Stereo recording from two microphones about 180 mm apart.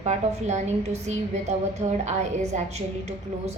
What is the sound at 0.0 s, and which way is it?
Speech, 40° right (ahead or behind).